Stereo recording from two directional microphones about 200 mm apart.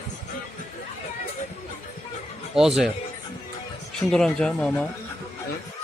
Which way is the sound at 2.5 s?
Centre (ahead or behind).